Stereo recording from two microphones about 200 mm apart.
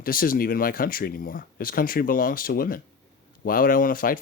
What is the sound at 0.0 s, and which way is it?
Speech, 45° left (ahead or behind).